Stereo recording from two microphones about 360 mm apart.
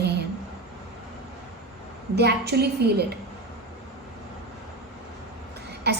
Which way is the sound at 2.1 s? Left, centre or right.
Right.